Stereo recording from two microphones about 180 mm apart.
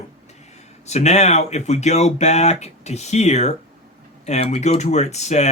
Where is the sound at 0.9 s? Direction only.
40° left (ahead or behind).